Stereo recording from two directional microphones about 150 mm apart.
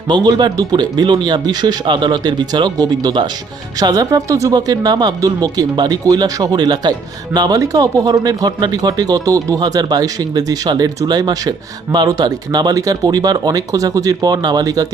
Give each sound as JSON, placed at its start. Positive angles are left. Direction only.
{"t": 0.1, "sound": "speech", "side_deg": -30}